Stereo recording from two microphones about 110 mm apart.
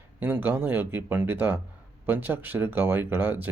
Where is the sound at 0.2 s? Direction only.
15° right (ahead or behind).